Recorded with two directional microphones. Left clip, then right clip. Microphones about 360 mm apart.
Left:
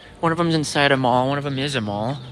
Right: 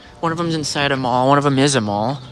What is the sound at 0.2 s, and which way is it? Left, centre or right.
Speech, centre.